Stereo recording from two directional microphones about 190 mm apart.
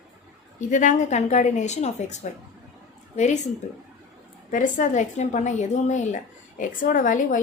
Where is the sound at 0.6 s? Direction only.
40° left (ahead or behind).